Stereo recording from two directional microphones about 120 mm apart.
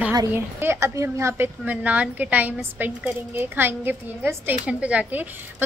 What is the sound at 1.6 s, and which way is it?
A woman's voice, 10° right (ahead or behind).